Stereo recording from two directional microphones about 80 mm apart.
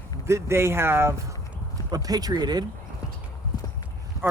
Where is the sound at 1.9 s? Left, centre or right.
Right.